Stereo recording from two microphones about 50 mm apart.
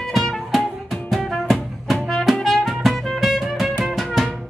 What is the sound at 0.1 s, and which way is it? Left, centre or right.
Music, centre.